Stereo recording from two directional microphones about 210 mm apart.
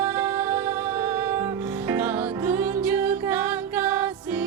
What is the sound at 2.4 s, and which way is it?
Music, 10° right (ahead or behind).